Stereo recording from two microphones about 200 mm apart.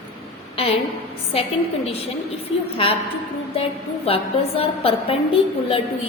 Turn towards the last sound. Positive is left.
turn(degrees=30)  # may be behind; listen again after turning